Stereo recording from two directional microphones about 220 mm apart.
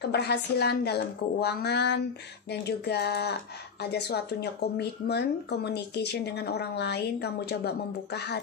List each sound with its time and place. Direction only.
0.0 s speech: 50° left (ahead or behind)